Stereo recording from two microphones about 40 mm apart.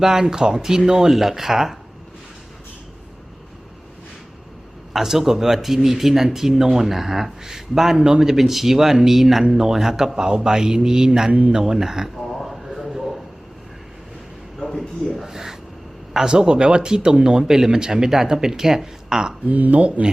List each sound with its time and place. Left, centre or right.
0.0 s speech: centre
4.9 s speech: centre
11.3 s speech: right
11.5 s speech: centre
12.5 s a sound: centre
14.6 s a sound: centre
15.1 s a sound: centre
16.1 s speech: centre
19.5 s speech: right